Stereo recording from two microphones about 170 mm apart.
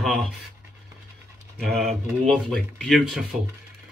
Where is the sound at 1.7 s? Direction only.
Centre (ahead or behind).